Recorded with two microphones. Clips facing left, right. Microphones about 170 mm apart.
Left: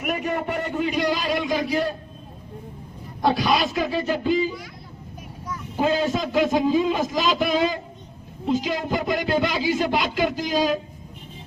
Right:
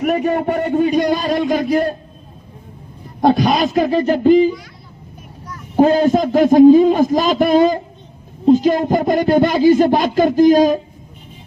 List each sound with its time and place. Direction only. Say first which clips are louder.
0.0 s speech: right 9 dB; 60° right (ahead or behind)
3.2 s speech: right 7 dB; 50° right (ahead or behind)
5.7 s speech: right 10 dB; 50° right (ahead or behind)